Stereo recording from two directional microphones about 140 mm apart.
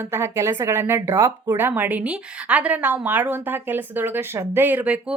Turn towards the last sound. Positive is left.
turn(degrees=-10)  # may be behind; listen again after turning